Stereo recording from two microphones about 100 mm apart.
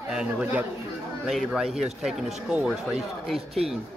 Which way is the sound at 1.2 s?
Centre (ahead or behind).